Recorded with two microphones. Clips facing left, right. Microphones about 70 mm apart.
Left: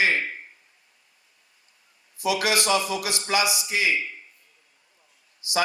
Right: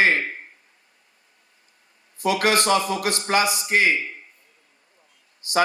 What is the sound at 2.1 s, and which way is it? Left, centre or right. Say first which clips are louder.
A man's voice: right 4 dB; right.